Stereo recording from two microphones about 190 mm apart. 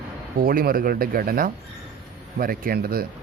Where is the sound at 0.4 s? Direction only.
50° right (ahead or behind).